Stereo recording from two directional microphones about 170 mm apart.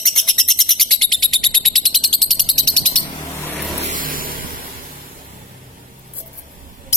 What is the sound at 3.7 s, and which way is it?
Vehicle, 45° right (ahead or behind).